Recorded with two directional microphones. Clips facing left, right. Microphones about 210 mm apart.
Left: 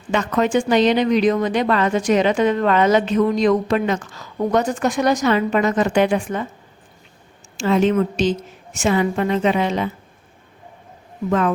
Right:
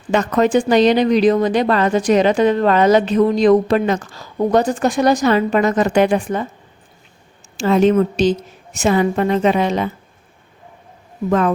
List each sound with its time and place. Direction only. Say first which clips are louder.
0.1 s speech: right 4 dB; 40° right (ahead or behind)
7.5 s speech: right 3 dB; 35° right (ahead or behind)
11.3 s speech: right 3 dB; 40° right (ahead or behind)